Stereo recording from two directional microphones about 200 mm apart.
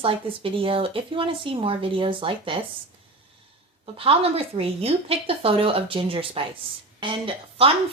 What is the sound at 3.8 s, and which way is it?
Speech, 25° right (ahead or behind).